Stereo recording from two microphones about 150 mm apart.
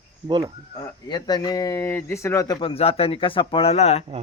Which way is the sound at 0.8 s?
25° left (ahead or behind).